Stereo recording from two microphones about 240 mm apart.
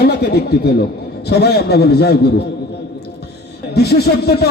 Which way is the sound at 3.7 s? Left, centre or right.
Left.